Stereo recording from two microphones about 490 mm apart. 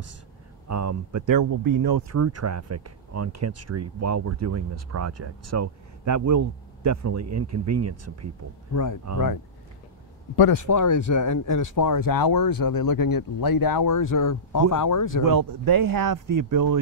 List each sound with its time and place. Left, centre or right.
0.7 s speech: right
8.7 s speech: left
10.3 s speech: left
15.2 s speech: right